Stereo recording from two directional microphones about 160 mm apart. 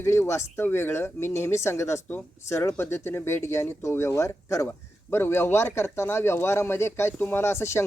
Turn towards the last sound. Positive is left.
turn(degrees=15)  # may be behind; listen again after turning